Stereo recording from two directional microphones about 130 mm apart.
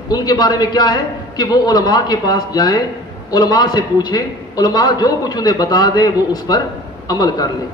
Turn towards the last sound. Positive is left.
turn(degrees=30)  # may be behind; listen again after turning